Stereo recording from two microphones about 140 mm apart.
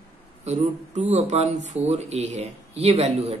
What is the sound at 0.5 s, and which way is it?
Speech, 55° right (ahead or behind).